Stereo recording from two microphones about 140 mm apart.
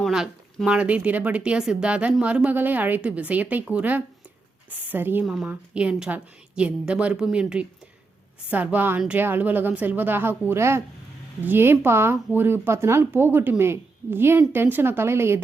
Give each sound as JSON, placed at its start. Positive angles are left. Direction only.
{"t": 0.0, "sound": "speech", "side_deg": -5}